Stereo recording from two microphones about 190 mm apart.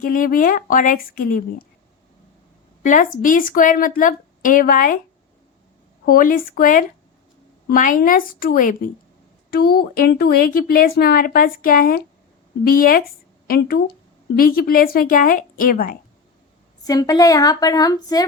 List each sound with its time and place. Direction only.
0.0 s speech: 45° left (ahead or behind)
2.8 s speech: 45° left (ahead or behind)
6.1 s speech: 50° left (ahead or behind)
16.8 s a woman's voice: 20° left (ahead or behind)